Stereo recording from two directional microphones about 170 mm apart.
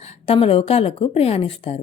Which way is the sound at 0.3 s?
35° left (ahead or behind).